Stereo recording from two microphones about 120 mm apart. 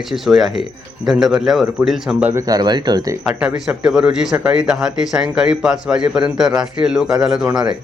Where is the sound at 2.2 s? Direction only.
15° right (ahead or behind).